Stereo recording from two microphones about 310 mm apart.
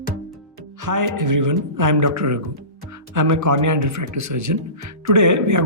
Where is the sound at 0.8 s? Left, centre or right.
Right.